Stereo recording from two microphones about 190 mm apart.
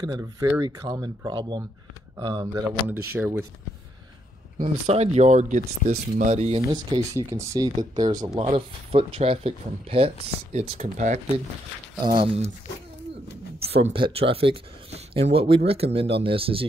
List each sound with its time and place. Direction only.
0.0 s speech: 20° right (ahead or behind)
4.6 s speech: 30° right (ahead or behind)
7.2 s speech: 15° right (ahead or behind); by 11.1 s 35° right (ahead or behind)
12.0 s speech: 25° right (ahead or behind)
13.6 s speech: 30° right (ahead or behind)